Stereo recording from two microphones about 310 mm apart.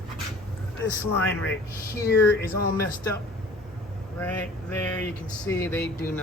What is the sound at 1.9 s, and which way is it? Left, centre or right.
Speech, centre.